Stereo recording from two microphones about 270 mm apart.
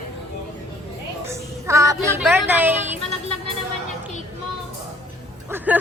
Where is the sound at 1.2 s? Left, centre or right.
Centre.